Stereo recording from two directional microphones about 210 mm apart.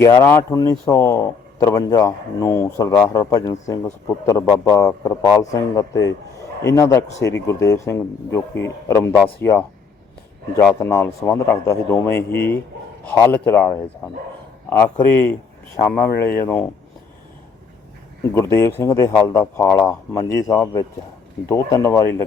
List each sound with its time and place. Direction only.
0.0 s speech: 15° left (ahead or behind)
10.8 s speech: 10° left (ahead or behind)
18.2 s speech: 15° left (ahead or behind)